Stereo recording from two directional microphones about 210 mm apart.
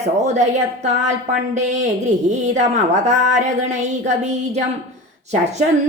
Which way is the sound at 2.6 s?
35° right (ahead or behind).